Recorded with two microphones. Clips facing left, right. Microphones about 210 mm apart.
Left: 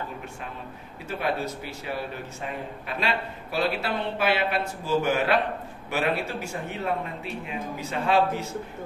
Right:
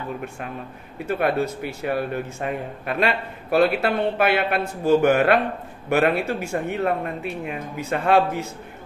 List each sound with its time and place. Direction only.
1.0 s a man's voice: 55° right (ahead or behind)